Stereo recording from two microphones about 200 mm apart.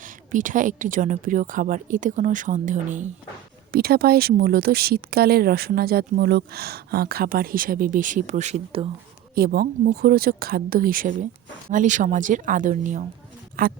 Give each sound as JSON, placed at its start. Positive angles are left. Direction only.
{"t": 0.0, "sound": "speech", "side_deg": -40}
{"t": 3.7, "sound": "speech", "side_deg": -50}
{"t": 9.3, "sound": "speech", "side_deg": -50}